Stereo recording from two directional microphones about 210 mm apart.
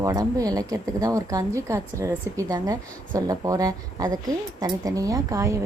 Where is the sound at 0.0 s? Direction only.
15° right (ahead or behind).